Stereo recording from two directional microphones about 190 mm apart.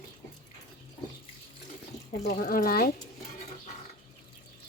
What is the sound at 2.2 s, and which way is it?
Speech, 45° left (ahead or behind).